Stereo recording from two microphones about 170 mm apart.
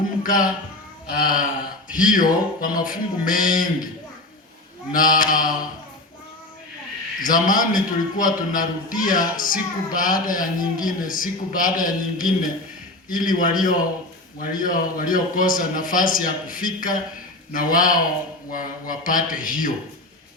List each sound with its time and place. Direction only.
0.2 s speech: 55° left (ahead or behind)
1.2 s a sound: 55° left (ahead or behind)
1.9 s speech: 50° left (ahead or behind)
4.9 s speech: 55° left (ahead or behind)
7.2 s speech: 55° left (ahead or behind)